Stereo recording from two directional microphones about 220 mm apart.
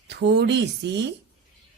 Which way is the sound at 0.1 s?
50° right (ahead or behind).